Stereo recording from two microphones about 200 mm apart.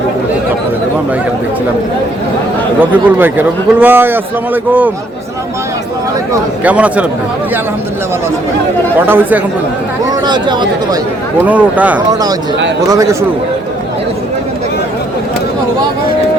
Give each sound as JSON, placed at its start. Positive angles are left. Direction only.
{"t": 2.8, "sound": "a man's voice", "side_deg": -10}
{"t": 6.7, "sound": "a man's voice", "side_deg": -5}
{"t": 9.0, "sound": "a man's voice", "side_deg": -10}
{"t": 10.2, "sound": "speech", "side_deg": -20}
{"t": 11.3, "sound": "a man's voice", "side_deg": -5}